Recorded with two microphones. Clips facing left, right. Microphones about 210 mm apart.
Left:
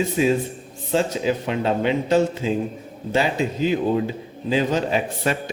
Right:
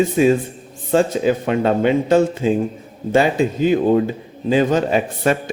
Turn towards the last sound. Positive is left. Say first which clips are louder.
# right 5 dB
turn(degrees=-50)  # may be behind; listen again after turning